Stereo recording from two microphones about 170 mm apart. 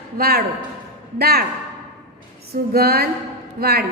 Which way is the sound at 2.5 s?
65° right (ahead or behind).